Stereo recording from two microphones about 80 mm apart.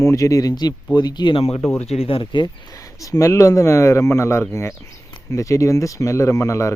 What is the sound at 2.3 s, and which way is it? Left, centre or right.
Speech, left.